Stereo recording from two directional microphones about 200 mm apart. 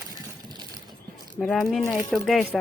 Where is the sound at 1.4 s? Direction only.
Centre (ahead or behind).